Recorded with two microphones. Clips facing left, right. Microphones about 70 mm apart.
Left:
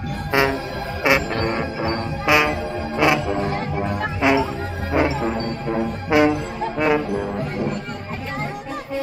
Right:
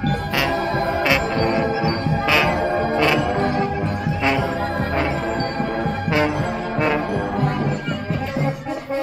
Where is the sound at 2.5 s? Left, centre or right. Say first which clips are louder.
Right 6 dB; right.